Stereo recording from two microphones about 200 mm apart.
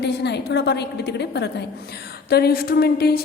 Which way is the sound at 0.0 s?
55° left (ahead or behind).